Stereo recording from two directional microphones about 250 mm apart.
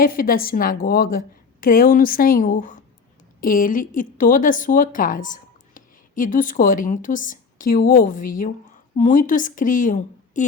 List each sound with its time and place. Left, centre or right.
0.0 s speech: left